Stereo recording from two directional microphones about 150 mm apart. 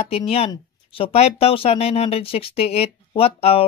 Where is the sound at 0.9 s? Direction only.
40° left (ahead or behind).